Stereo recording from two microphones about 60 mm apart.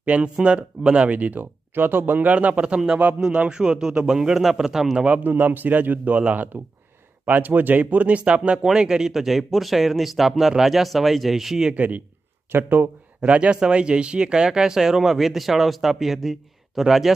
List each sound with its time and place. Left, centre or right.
0.0 s speech: centre
5.0 s speech: right; by 11.7 s centre
11.7 s speech: right
12.5 s speech: right
13.2 s speech: right